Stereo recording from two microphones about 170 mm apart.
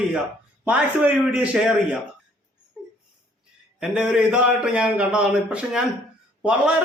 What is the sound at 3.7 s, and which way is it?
A man's voice, 5° right (ahead or behind).